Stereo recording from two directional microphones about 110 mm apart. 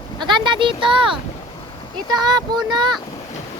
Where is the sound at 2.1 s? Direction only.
40° right (ahead or behind).